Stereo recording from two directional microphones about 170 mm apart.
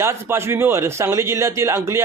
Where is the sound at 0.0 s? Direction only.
15° right (ahead or behind).